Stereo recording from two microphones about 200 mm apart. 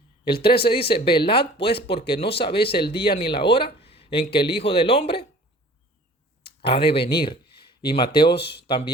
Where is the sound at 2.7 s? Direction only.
25° left (ahead or behind).